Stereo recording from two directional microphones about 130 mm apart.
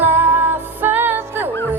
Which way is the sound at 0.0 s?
15° right (ahead or behind).